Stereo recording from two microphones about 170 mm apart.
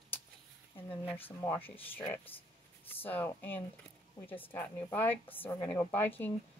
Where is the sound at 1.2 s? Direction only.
10° left (ahead or behind).